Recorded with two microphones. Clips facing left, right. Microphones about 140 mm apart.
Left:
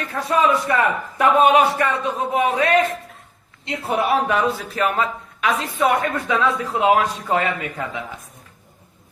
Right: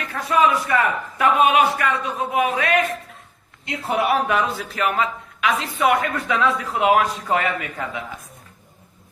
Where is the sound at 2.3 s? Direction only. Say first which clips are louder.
Left 2 dB; 30° left (ahead or behind).